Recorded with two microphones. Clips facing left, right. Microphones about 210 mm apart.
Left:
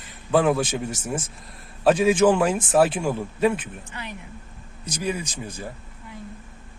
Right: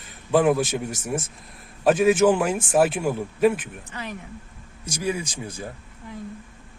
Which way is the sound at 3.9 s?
35° right (ahead or behind).